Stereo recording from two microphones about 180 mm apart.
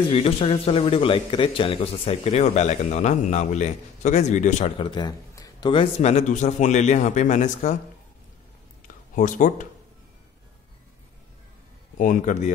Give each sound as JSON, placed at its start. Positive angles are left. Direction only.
{"t": 0.1, "sound": "speech", "side_deg": 30}
{"t": 4.7, "sound": "speech", "side_deg": 25}
{"t": 8.8, "sound": "a sound", "side_deg": 45}
{"t": 12.0, "sound": "speech", "side_deg": 45}